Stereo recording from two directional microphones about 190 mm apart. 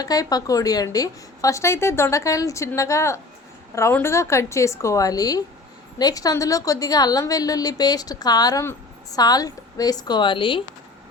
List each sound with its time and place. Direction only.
0.0 s a woman's voice: 20° left (ahead or behind)